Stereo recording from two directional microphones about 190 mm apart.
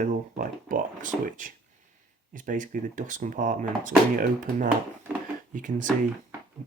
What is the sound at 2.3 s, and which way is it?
Speech, 45° right (ahead or behind).